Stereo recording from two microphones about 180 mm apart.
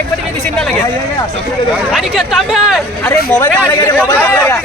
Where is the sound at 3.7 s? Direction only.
20° left (ahead or behind).